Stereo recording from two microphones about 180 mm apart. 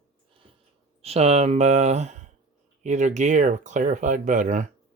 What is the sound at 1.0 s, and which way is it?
Speech, 35° right (ahead or behind).